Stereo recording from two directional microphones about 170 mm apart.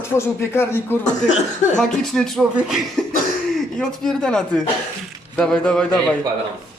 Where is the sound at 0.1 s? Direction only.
15° left (ahead or behind).